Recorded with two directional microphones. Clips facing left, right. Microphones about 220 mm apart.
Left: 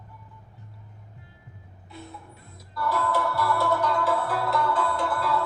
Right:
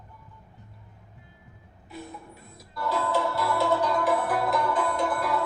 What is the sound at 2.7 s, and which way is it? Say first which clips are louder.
Music: even; 15° right (ahead or behind).